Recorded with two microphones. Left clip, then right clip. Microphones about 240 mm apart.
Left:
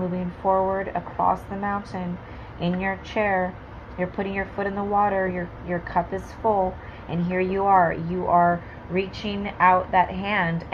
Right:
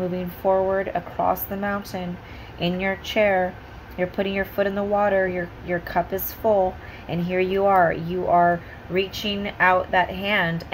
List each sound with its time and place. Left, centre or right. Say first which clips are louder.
0.4 s speech: right 1 dB; right